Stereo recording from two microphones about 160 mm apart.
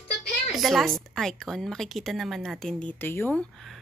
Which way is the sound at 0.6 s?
Centre (ahead or behind).